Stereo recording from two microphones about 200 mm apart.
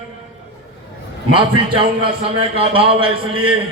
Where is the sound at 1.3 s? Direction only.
25° right (ahead or behind).